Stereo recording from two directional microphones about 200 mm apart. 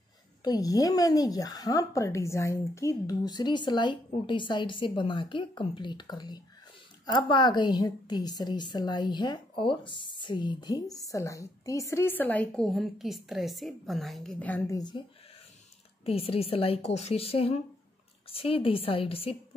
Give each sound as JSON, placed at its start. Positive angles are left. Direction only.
{"t": 0.4, "sound": "a woman's voice", "side_deg": 20}
{"t": 16.1, "sound": "a woman's voice", "side_deg": 30}